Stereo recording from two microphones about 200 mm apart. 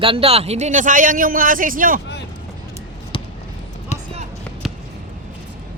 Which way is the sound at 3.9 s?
35° left (ahead or behind).